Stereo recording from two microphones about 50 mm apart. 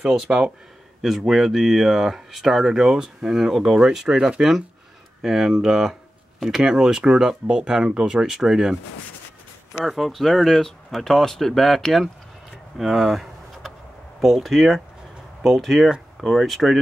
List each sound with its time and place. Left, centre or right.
0.3 s speech: right
1.0 s speech: centre
9.8 s speech: centre
12.7 s a sound: centre
14.2 s speech: centre